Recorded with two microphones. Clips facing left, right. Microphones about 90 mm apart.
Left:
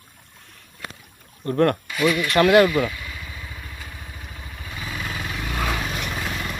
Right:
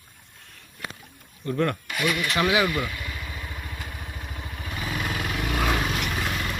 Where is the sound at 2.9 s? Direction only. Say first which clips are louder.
Right 1 dB; 20° right (ahead or behind).